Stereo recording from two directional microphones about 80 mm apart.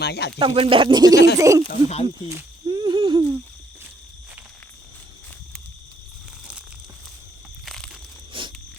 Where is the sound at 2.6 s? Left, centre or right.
Right.